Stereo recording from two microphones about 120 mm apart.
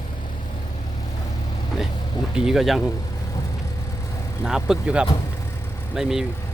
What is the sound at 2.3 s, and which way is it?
Speech, 5° right (ahead or behind).